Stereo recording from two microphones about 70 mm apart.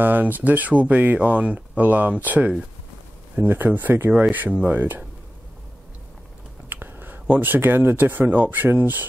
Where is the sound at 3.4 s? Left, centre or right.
Right.